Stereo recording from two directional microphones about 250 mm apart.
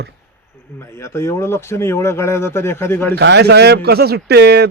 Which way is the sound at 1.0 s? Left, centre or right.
Centre.